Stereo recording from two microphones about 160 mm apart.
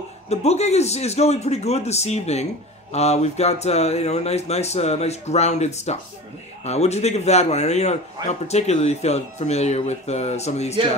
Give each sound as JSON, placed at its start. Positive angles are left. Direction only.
{"t": 0.3, "sound": "a man's voice", "side_deg": 40}